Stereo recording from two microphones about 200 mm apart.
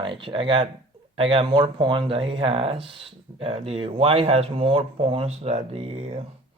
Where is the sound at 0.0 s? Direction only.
25° right (ahead or behind).